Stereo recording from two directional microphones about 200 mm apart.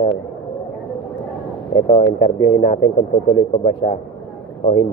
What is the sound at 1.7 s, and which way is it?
Speech, 25° left (ahead or behind).